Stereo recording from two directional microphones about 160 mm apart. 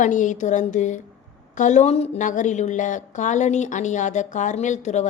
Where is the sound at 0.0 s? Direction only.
50° left (ahead or behind).